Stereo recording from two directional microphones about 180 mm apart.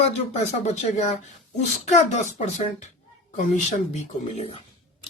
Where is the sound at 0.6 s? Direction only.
40° left (ahead or behind).